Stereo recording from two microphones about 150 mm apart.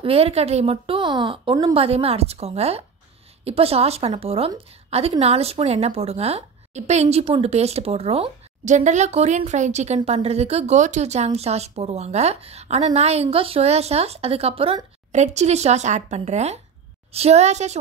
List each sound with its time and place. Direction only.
0.0 s speech: 40° right (ahead or behind)